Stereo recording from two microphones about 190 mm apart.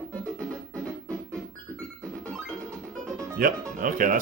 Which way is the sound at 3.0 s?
15° right (ahead or behind).